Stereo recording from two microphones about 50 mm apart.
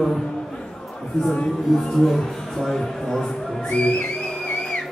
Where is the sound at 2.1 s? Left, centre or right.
Centre.